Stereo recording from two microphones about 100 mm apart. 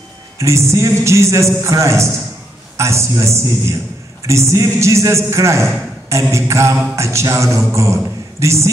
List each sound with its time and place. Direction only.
0.4 s a man's voice: 30° right (ahead or behind)